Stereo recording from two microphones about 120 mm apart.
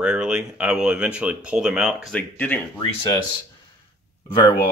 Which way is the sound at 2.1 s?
10° left (ahead or behind).